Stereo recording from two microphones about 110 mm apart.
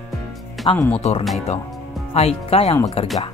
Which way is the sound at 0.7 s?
10° left (ahead or behind).